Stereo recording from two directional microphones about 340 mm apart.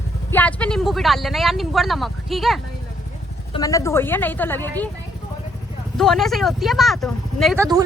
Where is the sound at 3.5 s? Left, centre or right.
Centre.